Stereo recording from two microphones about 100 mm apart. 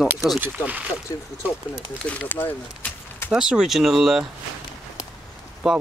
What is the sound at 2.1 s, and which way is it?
Speech, 15° left (ahead or behind).